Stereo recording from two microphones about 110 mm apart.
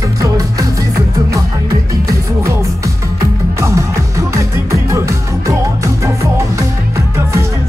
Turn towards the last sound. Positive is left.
turn(degrees=-30)  # may be behind; listen again after turning